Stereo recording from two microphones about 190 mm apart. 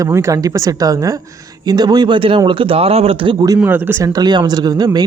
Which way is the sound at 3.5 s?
10° right (ahead or behind).